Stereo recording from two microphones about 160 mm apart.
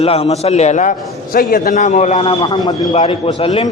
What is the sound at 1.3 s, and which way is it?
Speech, 60° left (ahead or behind).